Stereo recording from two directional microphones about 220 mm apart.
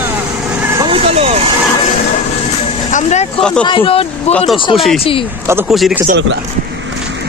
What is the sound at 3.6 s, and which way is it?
Speech, 25° left (ahead or behind).